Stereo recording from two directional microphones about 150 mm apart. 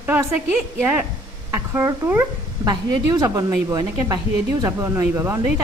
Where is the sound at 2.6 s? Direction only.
25° right (ahead or behind).